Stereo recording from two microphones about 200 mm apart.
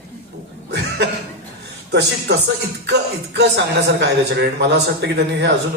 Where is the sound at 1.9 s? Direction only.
55° right (ahead or behind).